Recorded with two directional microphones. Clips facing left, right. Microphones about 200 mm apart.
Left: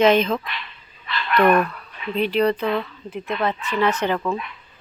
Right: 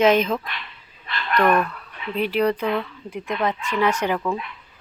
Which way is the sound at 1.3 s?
5° left (ahead or behind).